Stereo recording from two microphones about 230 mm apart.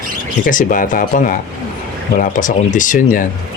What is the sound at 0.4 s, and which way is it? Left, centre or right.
Speech, left.